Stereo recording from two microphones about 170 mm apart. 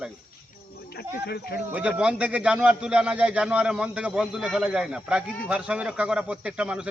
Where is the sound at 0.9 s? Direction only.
70° left (ahead or behind).